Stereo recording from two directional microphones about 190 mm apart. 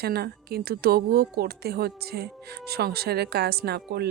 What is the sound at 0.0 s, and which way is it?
A woman's voice, 55° right (ahead or behind).